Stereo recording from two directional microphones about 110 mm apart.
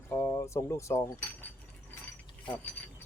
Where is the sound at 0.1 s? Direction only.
25° left (ahead or behind).